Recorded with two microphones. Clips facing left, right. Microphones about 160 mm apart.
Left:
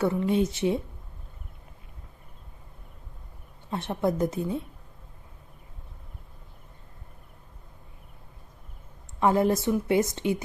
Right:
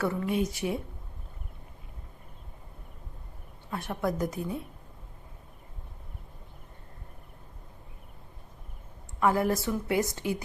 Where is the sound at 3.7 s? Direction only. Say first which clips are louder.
Left 4 dB; 25° left (ahead or behind).